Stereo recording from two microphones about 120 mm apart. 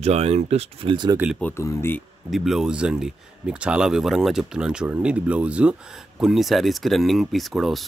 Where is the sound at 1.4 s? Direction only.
25° left (ahead or behind).